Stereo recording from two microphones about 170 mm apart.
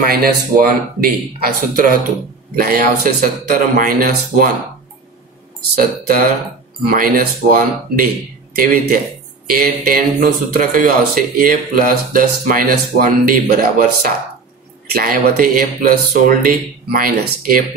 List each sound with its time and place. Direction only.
0.0 s speech: 60° right (ahead or behind)
5.8 s speech: 60° right (ahead or behind)
9.5 s speech: 55° right (ahead or behind)